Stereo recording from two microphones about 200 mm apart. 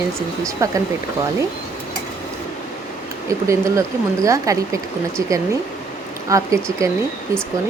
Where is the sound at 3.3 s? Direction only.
15° right (ahead or behind).